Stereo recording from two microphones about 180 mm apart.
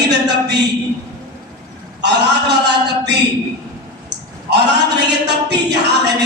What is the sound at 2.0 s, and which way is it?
Speech, 70° right (ahead or behind).